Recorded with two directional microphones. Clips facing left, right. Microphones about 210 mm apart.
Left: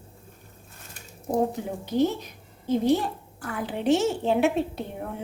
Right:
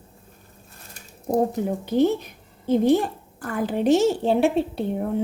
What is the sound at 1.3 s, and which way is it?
Speech, 40° right (ahead or behind).